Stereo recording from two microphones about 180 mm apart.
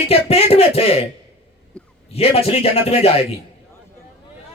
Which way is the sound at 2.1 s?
35° left (ahead or behind).